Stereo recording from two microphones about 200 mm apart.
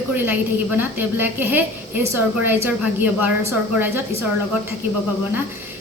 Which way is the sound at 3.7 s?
10° right (ahead or behind).